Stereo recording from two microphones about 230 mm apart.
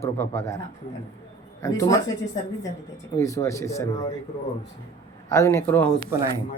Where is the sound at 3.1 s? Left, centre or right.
Centre.